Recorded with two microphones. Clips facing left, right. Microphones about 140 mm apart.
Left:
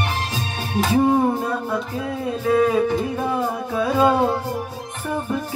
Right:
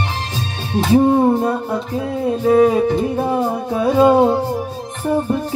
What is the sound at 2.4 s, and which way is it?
Music, 30° right (ahead or behind).